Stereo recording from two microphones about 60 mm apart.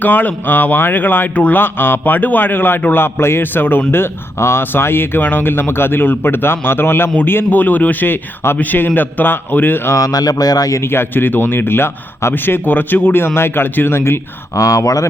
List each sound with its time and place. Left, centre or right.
0.0 s speech: left
9.9 s speech: left
10.8 s speech: left
14.5 s speech: left